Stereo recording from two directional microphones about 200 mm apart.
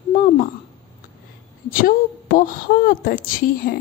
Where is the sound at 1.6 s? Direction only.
45° left (ahead or behind).